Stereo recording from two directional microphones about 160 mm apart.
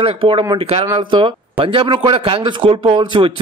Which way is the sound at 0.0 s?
35° right (ahead or behind).